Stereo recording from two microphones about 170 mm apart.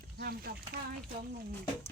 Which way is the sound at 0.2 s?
65° right (ahead or behind).